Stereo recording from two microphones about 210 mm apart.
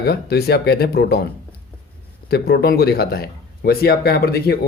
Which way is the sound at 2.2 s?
50° left (ahead or behind).